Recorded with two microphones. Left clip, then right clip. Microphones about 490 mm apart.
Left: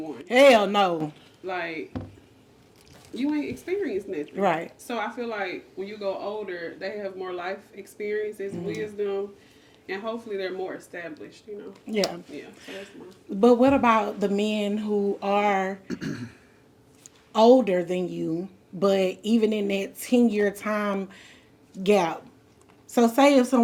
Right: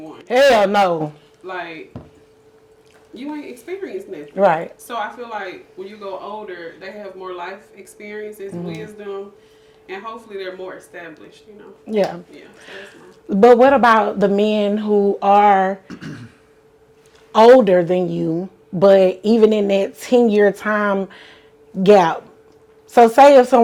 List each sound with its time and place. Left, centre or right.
0.3 s a man's voice: right
1.5 s speech: centre
3.3 s speech: centre
4.4 s speech: right
4.9 s speech: centre
10.3 s speech: centre
11.9 s speech: right
13.4 s speech: right
15.9 s speech: centre
17.3 s speech: right